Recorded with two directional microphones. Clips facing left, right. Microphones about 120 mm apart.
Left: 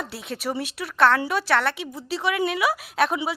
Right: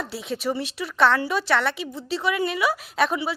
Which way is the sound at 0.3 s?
10° left (ahead or behind).